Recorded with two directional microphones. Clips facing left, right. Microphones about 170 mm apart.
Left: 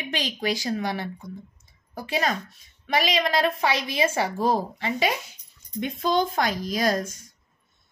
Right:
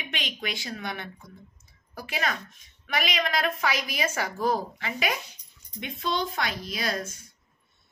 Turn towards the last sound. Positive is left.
turn(degrees=45)  # may be behind; listen again after turning